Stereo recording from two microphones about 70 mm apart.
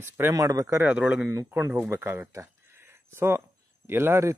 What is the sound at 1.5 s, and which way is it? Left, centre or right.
Speech, right.